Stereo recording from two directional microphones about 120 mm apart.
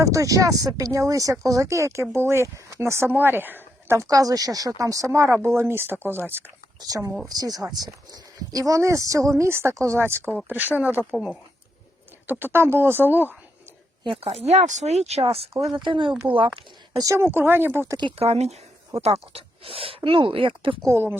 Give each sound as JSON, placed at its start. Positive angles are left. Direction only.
{"t": 0.0, "sound": "speech", "side_deg": -25}
{"t": 6.7, "sound": "speech", "side_deg": -30}
{"t": 12.3, "sound": "speech", "side_deg": -20}
{"t": 14.0, "sound": "speech", "side_deg": -50}
{"t": 15.7, "sound": "speech", "side_deg": -45}
{"t": 17.0, "sound": "speech", "side_deg": -25}
{"t": 18.2, "sound": "speech", "side_deg": -60}
{"t": 20.9, "sound": "speech", "side_deg": -20}